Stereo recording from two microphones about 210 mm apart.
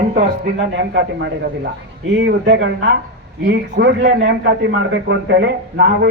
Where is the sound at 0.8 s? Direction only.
50° right (ahead or behind).